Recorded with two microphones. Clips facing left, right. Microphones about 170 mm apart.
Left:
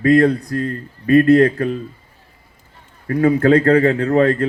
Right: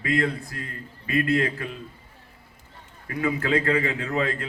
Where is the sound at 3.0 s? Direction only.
45° left (ahead or behind).